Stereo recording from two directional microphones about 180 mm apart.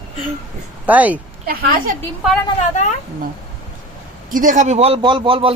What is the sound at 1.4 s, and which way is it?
Speech, 55° right (ahead or behind).